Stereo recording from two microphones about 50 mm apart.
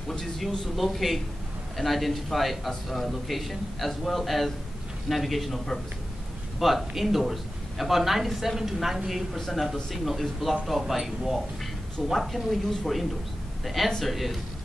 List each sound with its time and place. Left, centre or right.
0.1 s speech: centre